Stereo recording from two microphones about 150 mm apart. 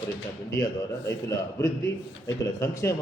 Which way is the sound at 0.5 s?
25° left (ahead or behind).